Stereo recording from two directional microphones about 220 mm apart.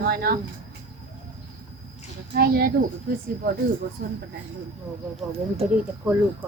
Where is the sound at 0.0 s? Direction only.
45° right (ahead or behind).